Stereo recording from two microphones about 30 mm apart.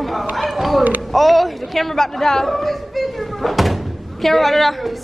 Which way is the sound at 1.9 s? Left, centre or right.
Centre.